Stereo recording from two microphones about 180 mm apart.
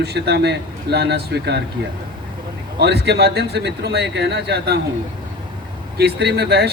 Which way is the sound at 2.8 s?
65° right (ahead or behind).